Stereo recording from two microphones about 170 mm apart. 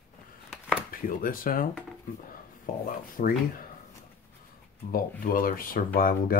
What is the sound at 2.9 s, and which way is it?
Speech, 60° left (ahead or behind).